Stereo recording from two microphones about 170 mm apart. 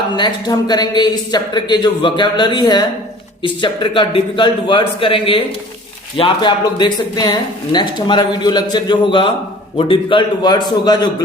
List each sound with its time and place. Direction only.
0.2 s a man's voice: 25° left (ahead or behind)